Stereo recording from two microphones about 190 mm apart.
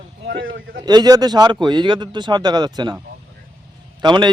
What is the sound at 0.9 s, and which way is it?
A man's voice, 20° right (ahead or behind).